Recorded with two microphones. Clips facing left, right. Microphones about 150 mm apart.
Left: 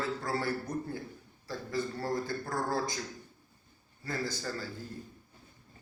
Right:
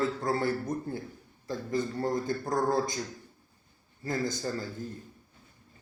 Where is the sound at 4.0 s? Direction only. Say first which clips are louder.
Right 5 dB; 20° right (ahead or behind).